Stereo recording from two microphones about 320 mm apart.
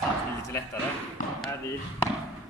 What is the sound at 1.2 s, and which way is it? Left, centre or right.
Speech, left.